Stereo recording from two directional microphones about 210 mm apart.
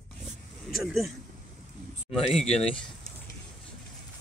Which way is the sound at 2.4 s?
30° left (ahead or behind).